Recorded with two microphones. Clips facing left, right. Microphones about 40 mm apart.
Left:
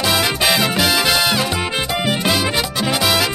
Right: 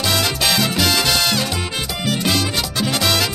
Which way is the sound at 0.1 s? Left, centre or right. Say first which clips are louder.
Left 2 dB; centre.